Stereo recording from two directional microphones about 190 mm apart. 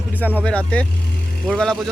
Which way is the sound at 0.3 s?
5° left (ahead or behind).